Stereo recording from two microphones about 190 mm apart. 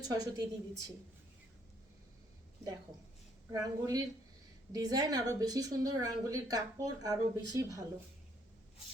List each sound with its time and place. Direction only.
0.1 s a woman's voice: 20° right (ahead or behind)
3.5 s a woman's voice: 15° right (ahead or behind)